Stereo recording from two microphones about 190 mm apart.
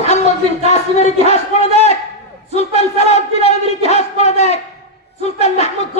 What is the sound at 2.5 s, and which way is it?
A man's voice, 35° left (ahead or behind).